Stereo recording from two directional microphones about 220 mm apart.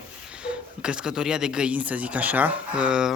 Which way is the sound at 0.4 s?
5° right (ahead or behind).